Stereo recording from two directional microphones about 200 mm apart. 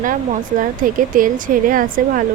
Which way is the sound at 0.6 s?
40° right (ahead or behind).